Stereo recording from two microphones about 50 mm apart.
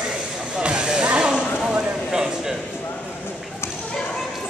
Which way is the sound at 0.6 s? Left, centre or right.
Centre.